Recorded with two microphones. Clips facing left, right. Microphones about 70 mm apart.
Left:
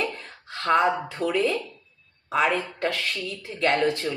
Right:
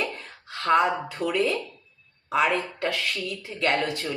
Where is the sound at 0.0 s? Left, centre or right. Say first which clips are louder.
Left 1 dB; centre.